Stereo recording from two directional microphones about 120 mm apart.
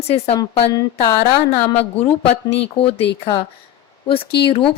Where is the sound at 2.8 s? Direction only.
55° left (ahead or behind).